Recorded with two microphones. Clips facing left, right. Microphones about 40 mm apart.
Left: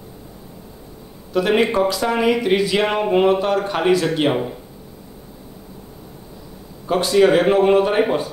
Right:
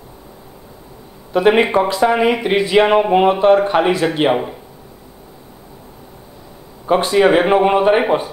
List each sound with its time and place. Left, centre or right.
1.3 s speech: right
6.9 s speech: right